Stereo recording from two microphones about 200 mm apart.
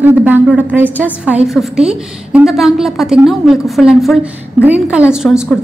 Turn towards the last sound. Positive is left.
turn(degrees=0)  # may be behind; listen again after turning